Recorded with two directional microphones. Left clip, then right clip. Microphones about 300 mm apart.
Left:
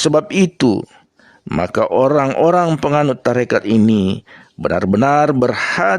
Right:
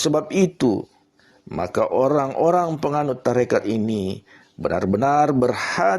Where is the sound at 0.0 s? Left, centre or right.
Left.